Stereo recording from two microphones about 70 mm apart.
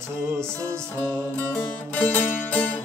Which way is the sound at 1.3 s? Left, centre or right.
Left.